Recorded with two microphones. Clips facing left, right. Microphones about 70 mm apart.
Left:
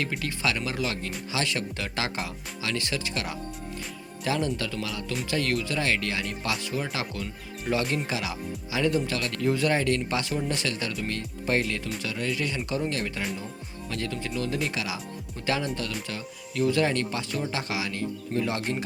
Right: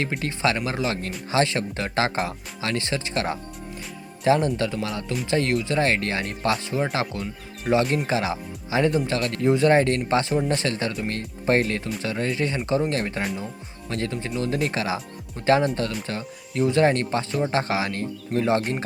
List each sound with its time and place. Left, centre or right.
0.2 s speech: right
7.7 s speech: centre
8.0 s speech: right